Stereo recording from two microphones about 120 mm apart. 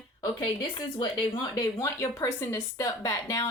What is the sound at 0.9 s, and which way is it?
Speech, 40° left (ahead or behind).